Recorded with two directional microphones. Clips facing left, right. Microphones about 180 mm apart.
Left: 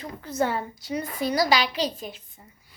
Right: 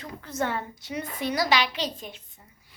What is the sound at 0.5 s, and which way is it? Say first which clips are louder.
A woman's voice: left 3 dB; 35° left (ahead or behind).